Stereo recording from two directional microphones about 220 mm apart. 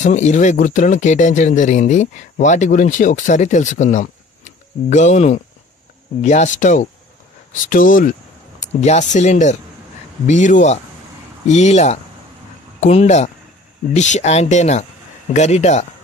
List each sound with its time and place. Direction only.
0.0 s speech: 30° left (ahead or behind)